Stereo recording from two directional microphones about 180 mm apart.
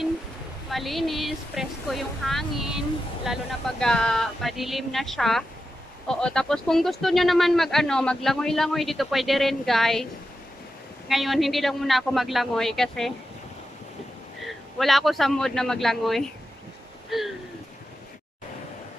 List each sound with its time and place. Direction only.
0.7 s speech: centre (ahead or behind)
11.1 s speech: centre (ahead or behind)
14.8 s speech: centre (ahead or behind)
17.1 s a sound: centre (ahead or behind)